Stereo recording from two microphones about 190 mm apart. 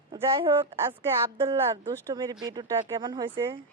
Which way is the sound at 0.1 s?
25° right (ahead or behind).